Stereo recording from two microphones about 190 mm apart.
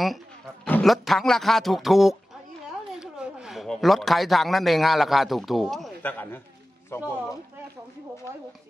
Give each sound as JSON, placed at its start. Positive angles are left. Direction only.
{"t": 0.7, "sound": "speech", "side_deg": 5}